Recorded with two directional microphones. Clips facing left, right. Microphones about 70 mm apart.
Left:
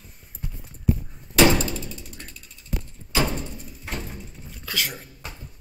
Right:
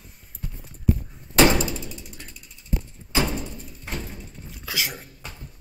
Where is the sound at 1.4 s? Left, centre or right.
Centre.